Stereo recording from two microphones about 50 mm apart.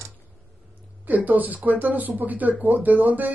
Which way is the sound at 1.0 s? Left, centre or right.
Right.